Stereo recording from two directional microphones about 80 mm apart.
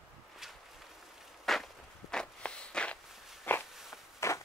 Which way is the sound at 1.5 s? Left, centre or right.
Centre.